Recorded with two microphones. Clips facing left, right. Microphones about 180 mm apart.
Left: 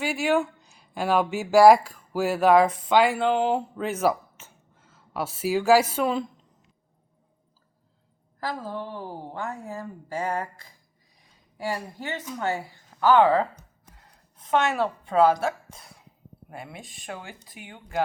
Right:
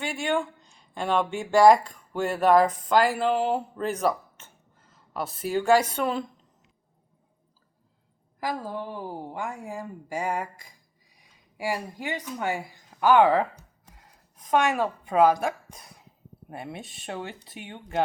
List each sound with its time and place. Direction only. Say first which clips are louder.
0.0 s speech: left 4 dB; 5° left (ahead or behind)
8.4 s a woman's voice: right 1 dB; 10° right (ahead or behind)
13.9 s a sound: even; 10° right (ahead or behind)
16.5 s speech: right 3 dB; 25° right (ahead or behind)